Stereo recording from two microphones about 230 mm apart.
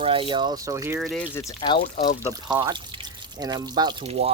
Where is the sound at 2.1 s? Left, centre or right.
Centre.